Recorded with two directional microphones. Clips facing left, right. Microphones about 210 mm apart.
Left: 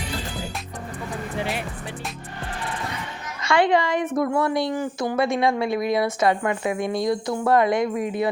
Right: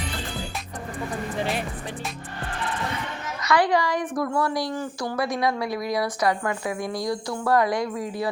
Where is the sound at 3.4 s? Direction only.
25° left (ahead or behind).